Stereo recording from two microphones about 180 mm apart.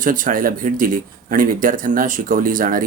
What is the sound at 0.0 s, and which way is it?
Speech, 50° right (ahead or behind).